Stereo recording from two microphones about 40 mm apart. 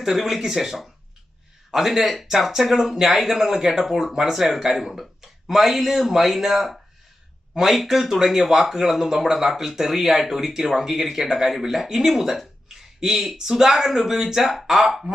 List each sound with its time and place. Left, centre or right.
0.0 s speech: centre